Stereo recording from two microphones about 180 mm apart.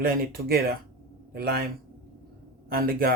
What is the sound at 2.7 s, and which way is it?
Speech, 55° right (ahead or behind).